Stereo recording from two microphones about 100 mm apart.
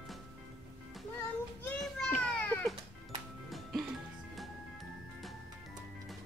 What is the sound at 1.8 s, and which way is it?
Children playing, 10° left (ahead or behind).